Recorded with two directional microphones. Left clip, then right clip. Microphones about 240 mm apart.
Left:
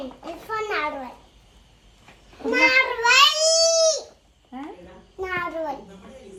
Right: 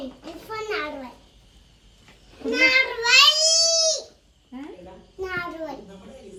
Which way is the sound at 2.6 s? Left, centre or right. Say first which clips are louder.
Even; centre.